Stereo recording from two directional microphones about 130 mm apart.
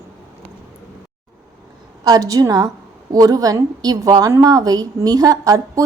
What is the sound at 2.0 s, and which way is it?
A woman's voice, 30° right (ahead or behind).